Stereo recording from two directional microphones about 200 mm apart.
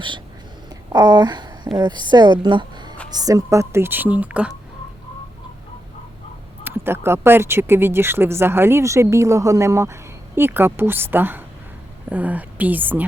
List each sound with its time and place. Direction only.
0.9 s a woman's voice: 20° right (ahead or behind)
6.7 s speech: 10° right (ahead or behind)